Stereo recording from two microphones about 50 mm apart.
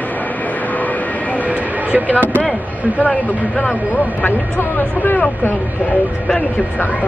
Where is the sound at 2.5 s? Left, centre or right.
Right.